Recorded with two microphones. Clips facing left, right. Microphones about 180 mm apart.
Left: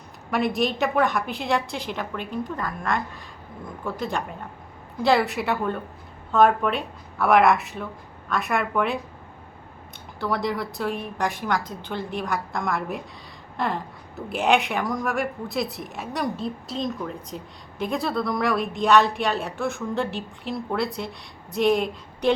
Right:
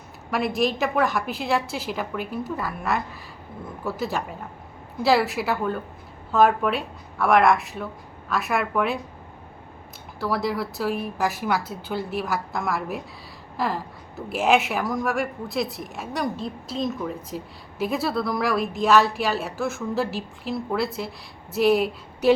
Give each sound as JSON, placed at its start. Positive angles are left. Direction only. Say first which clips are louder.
{"t": 0.3, "sound": "a woman's voice", "louder": "even", "side_deg": 0}
{"t": 10.2, "sound": "a woman's voice", "louder": "right 1 dB", "side_deg": 0}